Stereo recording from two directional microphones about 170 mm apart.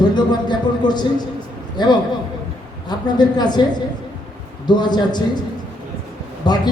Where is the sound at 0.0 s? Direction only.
25° left (ahead or behind).